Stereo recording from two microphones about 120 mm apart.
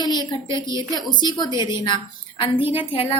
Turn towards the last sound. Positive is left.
turn(degrees=50)  # may be behind; listen again after turning